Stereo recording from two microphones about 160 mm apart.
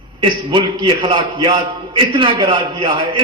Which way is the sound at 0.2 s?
30° right (ahead or behind).